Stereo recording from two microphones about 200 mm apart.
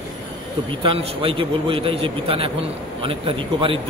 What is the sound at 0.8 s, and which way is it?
A man's voice, 25° right (ahead or behind).